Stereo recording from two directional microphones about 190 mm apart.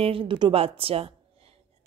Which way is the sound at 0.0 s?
30° right (ahead or behind).